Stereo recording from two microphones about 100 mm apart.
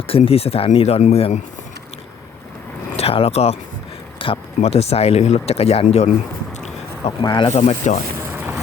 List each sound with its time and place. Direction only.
0.1 s speech: 80° left
2.9 s speech: 80° left
4.2 s speech: 75° left (ahead or behind)
7.2 s speech: 45° left (ahead or behind)
7.9 s speech: 90° left
8.3 s boat: 20° right (ahead or behind)